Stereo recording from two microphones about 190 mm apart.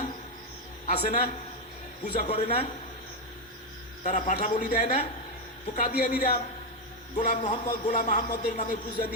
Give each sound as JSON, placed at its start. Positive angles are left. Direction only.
{"t": 1.0, "sound": "a man's voice", "side_deg": 35}
{"t": 4.0, "sound": "a man's voice", "side_deg": 40}